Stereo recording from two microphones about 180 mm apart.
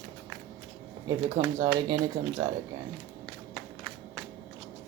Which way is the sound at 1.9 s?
20° right (ahead or behind).